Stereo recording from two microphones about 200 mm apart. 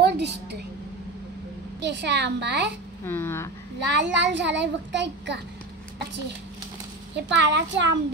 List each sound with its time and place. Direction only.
0.0 s a sound: 55° right (ahead or behind)
1.8 s a child's voice: 60° right (ahead or behind)
3.1 s speech: 10° left (ahead or behind)
3.9 s a child's voice: 65° right (ahead or behind)
7.2 s a child's voice: 60° right (ahead or behind)